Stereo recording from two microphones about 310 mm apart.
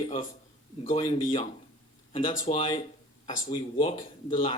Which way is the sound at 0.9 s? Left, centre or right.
Left.